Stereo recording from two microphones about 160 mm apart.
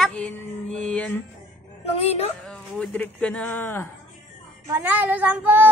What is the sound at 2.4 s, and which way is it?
A man's voice, 5° left (ahead or behind).